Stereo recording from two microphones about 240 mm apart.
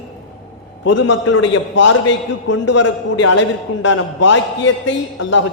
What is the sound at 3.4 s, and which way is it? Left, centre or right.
A man's voice, left.